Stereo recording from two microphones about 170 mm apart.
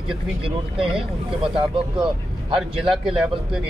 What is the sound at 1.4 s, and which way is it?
Speech, 30° right (ahead or behind).